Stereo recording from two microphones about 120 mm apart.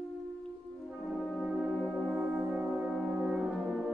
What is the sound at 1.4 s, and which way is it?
Music, 5° right (ahead or behind).